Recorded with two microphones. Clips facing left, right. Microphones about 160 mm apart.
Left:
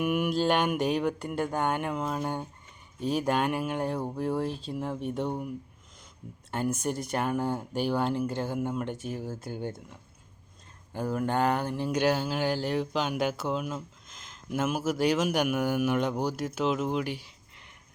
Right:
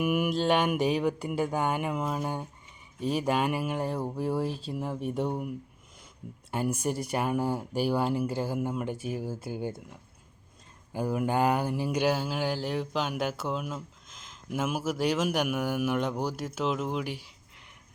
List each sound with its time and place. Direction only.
0.0 s speech: 5° right (ahead or behind)
10.9 s speech: 10° right (ahead or behind)